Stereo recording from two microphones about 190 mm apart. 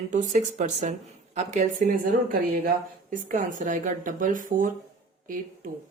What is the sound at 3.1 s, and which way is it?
Speech, 45° right (ahead or behind).